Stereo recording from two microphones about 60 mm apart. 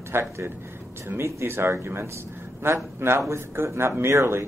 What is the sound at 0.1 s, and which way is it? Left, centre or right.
A man's voice, right.